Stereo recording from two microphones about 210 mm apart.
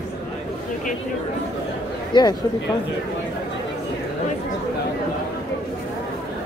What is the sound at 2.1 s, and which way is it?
Speech, 20° left (ahead or behind).